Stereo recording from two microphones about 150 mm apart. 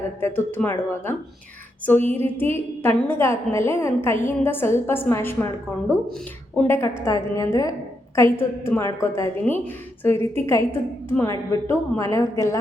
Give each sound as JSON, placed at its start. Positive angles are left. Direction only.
{"t": 0.2, "sound": "a woman's voice", "side_deg": 15}
{"t": 6.7, "sound": "a woman's voice", "side_deg": 15}